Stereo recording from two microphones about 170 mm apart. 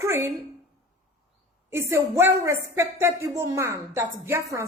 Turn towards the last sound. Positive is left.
turn(degrees=-15)  # may be behind; listen again after turning